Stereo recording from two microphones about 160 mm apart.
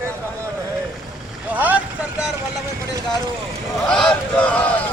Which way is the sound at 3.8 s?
5° left (ahead or behind).